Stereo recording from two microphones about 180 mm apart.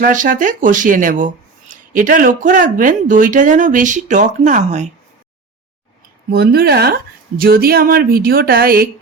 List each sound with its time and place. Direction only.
0.0 s speech: 45° right (ahead or behind)
6.3 s speech: 60° right (ahead or behind)